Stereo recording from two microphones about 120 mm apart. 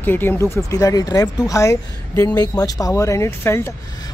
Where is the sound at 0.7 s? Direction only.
30° left (ahead or behind).